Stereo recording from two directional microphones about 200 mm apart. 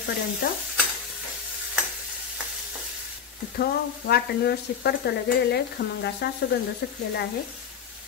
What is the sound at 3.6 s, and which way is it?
Sizzle, 50° left (ahead or behind).